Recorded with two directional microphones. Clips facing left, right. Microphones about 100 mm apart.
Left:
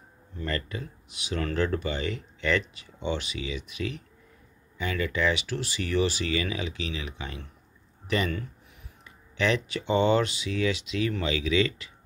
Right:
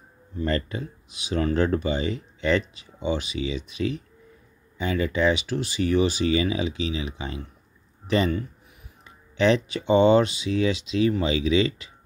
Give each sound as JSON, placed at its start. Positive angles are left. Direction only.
{"t": 0.5, "sound": "speech", "side_deg": -25}